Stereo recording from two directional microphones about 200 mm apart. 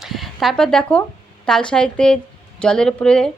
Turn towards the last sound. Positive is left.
turn(degrees=5)  # may be behind; listen again after turning